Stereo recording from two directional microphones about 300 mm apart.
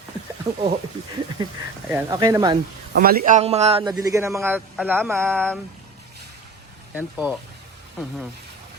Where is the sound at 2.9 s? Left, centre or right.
Right; by 5.6 s centre.